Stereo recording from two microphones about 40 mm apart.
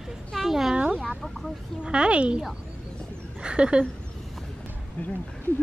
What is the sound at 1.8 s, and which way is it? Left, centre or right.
Speech, right.